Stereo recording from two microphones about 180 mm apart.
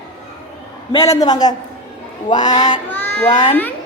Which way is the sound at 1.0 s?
20° left (ahead or behind).